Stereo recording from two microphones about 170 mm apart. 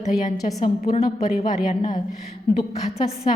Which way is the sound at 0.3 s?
45° left (ahead or behind).